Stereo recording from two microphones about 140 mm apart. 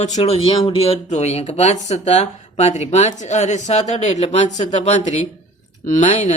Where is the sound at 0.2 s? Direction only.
45° left (ahead or behind).